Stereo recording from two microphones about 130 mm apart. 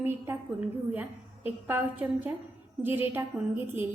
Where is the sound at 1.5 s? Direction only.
15° right (ahead or behind).